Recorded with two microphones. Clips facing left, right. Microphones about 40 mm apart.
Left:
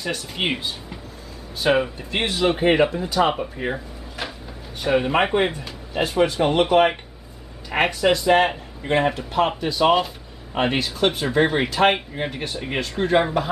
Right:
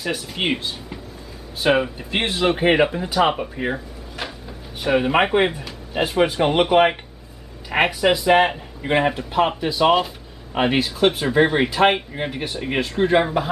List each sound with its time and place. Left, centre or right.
0.0 s speech: centre